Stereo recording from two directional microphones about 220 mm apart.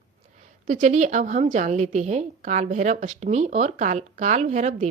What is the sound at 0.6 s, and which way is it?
A woman's voice, 35° right (ahead or behind).